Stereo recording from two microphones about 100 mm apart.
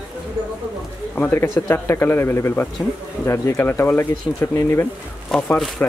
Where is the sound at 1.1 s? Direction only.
20° left (ahead or behind).